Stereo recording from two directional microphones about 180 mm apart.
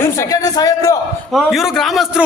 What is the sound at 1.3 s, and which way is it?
Speech, centre (ahead or behind).